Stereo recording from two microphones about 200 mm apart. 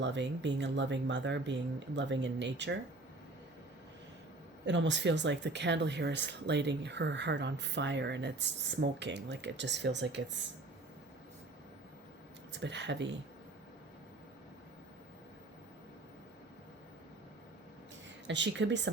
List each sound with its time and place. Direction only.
0.0 s speech: 60° right (ahead or behind)
4.6 s speech: 60° right (ahead or behind)
12.5 s speech: 60° right (ahead or behind)
18.3 s speech: 65° right (ahead or behind)